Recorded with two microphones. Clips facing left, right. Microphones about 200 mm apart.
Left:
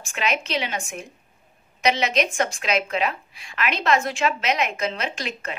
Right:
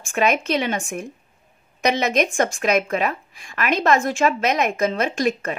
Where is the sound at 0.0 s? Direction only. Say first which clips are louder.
Right 6 dB; 50° right (ahead or behind).